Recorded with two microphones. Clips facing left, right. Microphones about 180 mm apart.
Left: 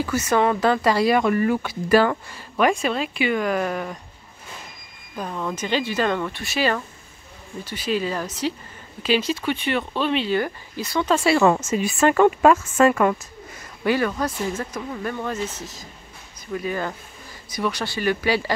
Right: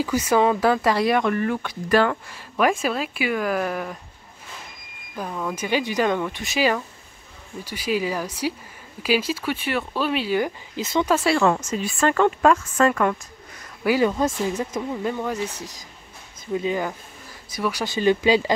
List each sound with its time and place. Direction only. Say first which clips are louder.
0.0 s speech: right 1 dB; 10° right (ahead or behind)
5.1 s speech: even; 5° right (ahead or behind)
11.1 s speech: left 3 dB; centre (ahead or behind)
13.8 s speech: right 2 dB; 15° right (ahead or behind)
17.5 s speech: even; 5° right (ahead or behind)
17.9 s speech: right 6 dB; 20° right (ahead or behind)